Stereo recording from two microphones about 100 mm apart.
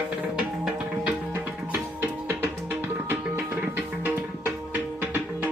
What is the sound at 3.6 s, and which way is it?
Music, 15° right (ahead or behind).